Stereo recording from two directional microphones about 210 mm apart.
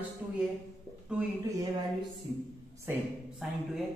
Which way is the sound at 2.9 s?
Centre (ahead or behind).